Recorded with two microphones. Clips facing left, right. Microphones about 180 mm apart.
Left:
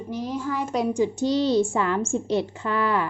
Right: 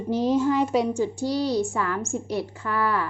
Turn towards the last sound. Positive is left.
turn(degrees=20)  # may be behind; listen again after turning